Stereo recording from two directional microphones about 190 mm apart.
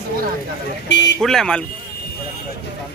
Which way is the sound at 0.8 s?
65° left (ahead or behind).